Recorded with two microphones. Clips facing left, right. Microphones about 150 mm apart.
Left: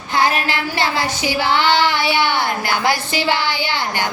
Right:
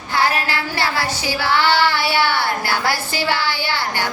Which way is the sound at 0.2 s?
20° left (ahead or behind).